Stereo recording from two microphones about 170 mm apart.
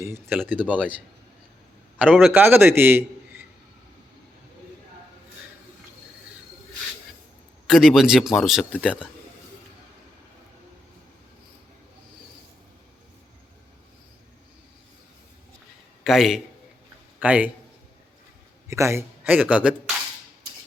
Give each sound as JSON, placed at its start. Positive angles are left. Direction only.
{"t": 0.0, "sound": "a man's voice", "side_deg": -15}
{"t": 0.6, "sound": "a man's voice", "side_deg": 5}
{"t": 2.0, "sound": "a man's voice", "side_deg": 0}
{"t": 2.3, "sound": "a man's voice", "side_deg": -10}
{"t": 7.7, "sound": "a man's voice", "side_deg": -5}
{"t": 16.0, "sound": "a man's voice", "side_deg": 0}
{"t": 18.7, "sound": "a man's voice", "side_deg": -15}